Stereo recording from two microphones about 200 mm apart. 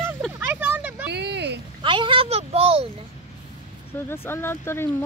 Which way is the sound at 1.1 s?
55° right (ahead or behind).